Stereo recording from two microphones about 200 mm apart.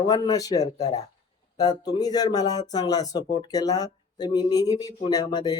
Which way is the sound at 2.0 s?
20° left (ahead or behind).